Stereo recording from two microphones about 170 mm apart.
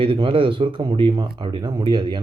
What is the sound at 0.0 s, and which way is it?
Speech, 30° right (ahead or behind).